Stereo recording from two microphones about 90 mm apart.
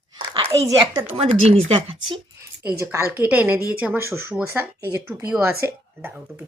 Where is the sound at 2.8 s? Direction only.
35° right (ahead or behind).